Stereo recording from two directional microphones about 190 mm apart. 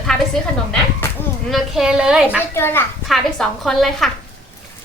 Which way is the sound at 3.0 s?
Centre (ahead or behind).